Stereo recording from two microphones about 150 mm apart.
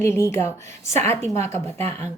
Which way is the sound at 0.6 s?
50° right (ahead or behind).